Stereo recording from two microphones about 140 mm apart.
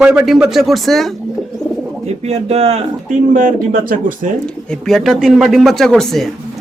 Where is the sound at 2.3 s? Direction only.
45° right (ahead or behind).